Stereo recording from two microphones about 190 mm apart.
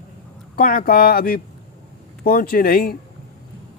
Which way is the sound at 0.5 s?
50° left (ahead or behind).